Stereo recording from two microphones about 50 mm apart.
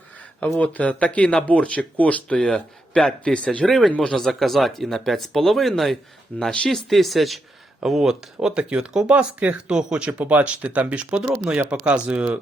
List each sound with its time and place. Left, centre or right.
0.6 s speech: left
2.4 s speech: centre
3.7 s speech: centre
3.9 s speech: left
4.2 s speech: centre
6.3 s speech: left
6.7 s speech: centre
8.4 s speech: centre
8.9 s speech: centre
9.1 s speech: right
9.6 s speech: centre